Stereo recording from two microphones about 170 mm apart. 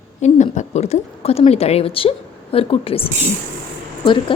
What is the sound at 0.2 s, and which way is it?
A woman's voice, 45° left (ahead or behind).